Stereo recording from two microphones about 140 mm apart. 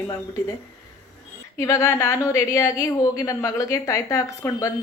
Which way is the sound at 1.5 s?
20° left (ahead or behind).